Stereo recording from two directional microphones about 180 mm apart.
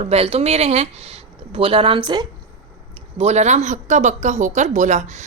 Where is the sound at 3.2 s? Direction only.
40° right (ahead or behind).